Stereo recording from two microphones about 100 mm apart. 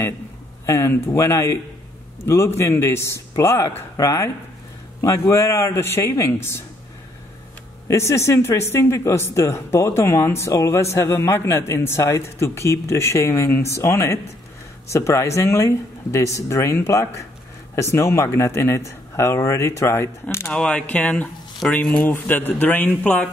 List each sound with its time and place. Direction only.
0.7 s speech: 30° left (ahead or behind)
7.9 s speech: 30° left (ahead or behind)
20.5 s speech: 10° left (ahead or behind)
22.1 s speech: 20° left (ahead or behind)